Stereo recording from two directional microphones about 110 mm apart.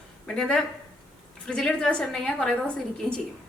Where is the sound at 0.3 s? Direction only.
5° left (ahead or behind).